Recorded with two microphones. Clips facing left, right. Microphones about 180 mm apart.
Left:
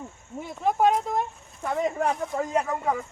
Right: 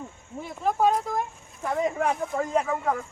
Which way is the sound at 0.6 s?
20° left (ahead or behind).